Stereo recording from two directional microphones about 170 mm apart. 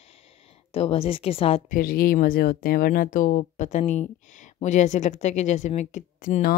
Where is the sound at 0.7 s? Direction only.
35° left (ahead or behind).